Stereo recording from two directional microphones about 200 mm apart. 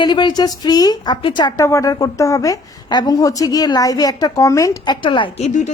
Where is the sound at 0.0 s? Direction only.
20° left (ahead or behind).